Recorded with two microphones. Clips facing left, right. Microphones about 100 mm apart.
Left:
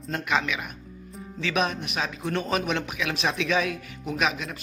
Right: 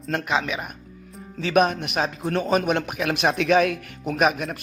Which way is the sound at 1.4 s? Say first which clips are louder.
Right 7 dB; 45° right (ahead or behind).